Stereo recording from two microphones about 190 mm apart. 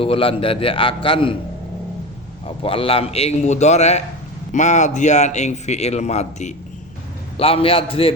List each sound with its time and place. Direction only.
0.0 s a man's voice: 30° left (ahead or behind)
2.6 s a man's voice: 30° left (ahead or behind)